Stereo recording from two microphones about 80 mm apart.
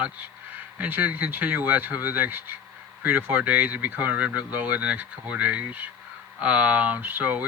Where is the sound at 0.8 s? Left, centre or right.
Centre.